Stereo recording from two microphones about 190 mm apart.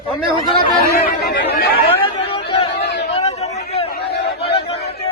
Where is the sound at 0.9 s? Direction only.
55° left (ahead or behind).